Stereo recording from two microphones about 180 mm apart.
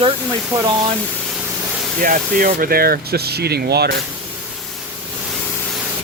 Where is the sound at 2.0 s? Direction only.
50° right (ahead or behind); by 3.9 s 65° right (ahead or behind).